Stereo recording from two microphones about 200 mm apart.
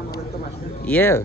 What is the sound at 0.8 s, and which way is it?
Speech, 10° left (ahead or behind).